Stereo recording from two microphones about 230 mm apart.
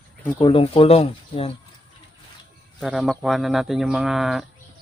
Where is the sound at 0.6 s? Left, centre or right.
Left.